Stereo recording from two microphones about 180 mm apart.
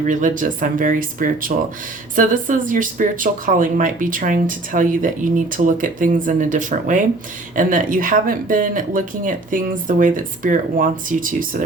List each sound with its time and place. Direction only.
0.1 s speech: 45° right (ahead or behind)